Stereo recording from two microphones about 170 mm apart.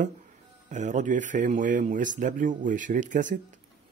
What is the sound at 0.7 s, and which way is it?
A man's voice, 45° right (ahead or behind).